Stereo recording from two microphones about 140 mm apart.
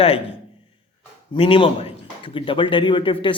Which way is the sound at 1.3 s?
40° left (ahead or behind).